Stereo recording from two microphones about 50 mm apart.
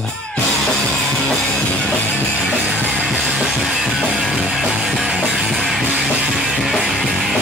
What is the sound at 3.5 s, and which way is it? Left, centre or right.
Music, centre.